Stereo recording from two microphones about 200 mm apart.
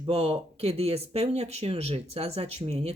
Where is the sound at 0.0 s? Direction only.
30° right (ahead or behind).